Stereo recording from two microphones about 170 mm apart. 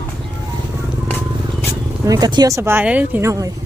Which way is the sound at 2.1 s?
25° right (ahead or behind).